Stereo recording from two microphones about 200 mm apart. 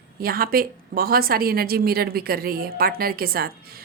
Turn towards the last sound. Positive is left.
turn(degrees=-50)  # may be behind; listen again after turning